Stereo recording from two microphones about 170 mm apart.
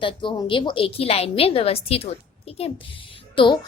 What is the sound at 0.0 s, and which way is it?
A woman's voice, 30° left (ahead or behind).